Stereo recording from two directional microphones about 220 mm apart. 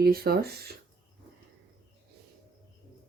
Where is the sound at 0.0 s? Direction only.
45° right (ahead or behind).